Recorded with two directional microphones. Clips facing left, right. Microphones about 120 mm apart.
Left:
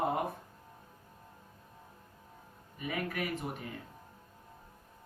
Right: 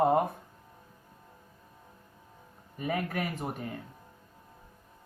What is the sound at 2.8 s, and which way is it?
Speech, 45° right (ahead or behind).